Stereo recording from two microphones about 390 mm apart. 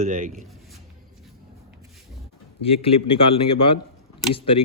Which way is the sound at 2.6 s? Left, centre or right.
Centre.